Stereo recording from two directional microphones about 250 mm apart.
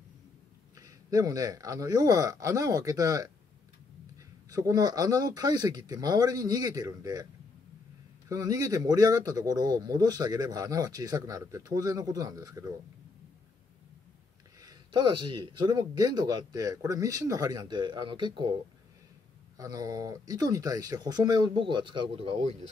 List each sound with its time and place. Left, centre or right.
0.7 s speech: centre
4.5 s speech: centre
8.3 s speech: centre
14.6 s speech: centre
19.5 s speech: centre